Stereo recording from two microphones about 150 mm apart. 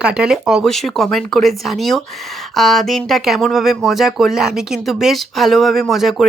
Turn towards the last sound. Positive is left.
turn(degrees=0)  # may be behind; listen again after turning